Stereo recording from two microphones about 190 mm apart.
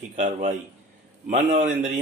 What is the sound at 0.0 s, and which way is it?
Speech, 40° right (ahead or behind).